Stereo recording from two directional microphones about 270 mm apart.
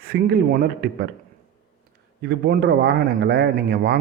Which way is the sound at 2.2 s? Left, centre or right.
Right.